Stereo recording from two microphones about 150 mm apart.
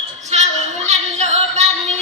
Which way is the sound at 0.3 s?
50° right (ahead or behind).